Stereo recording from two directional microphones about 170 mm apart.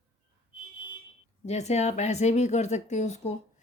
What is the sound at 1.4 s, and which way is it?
Speech, 40° left (ahead or behind).